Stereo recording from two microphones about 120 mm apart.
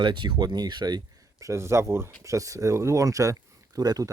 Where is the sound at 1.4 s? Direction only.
25° right (ahead or behind).